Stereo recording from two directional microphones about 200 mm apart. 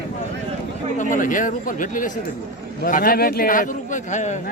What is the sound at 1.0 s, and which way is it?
Speech, 40° left (ahead or behind).